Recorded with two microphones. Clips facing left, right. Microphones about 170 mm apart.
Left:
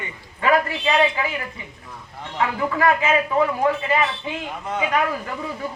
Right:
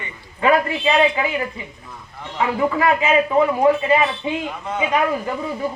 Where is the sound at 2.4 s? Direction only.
20° right (ahead or behind).